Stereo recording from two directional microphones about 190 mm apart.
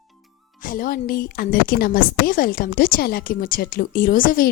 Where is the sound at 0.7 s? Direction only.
45° left (ahead or behind).